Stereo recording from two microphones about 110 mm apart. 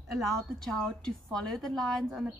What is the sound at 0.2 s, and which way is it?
A woman's voice, 5° left (ahead or behind).